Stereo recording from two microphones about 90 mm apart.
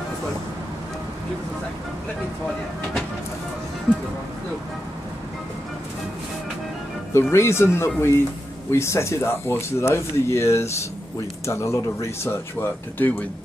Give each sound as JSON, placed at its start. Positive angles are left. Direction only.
{"t": 7.1, "sound": "speech", "side_deg": 30}